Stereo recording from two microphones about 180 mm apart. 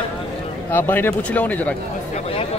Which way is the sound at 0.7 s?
10° left (ahead or behind).